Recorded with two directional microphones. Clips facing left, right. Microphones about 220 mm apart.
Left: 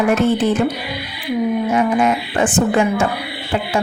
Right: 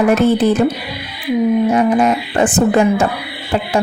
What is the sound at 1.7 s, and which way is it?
A woman's voice, 35° right (ahead or behind).